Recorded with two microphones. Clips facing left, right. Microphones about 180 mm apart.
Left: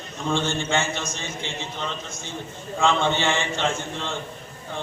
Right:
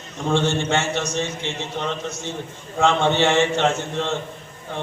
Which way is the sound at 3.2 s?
70° right (ahead or behind).